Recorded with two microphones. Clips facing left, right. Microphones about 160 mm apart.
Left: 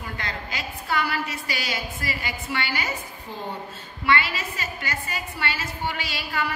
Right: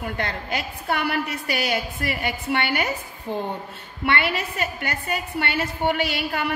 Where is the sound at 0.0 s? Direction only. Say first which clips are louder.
Right 5 dB; 60° right (ahead or behind).